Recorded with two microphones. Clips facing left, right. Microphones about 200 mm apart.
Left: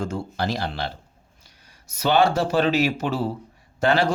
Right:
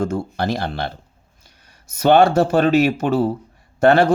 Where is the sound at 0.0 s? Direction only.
50° right (ahead or behind).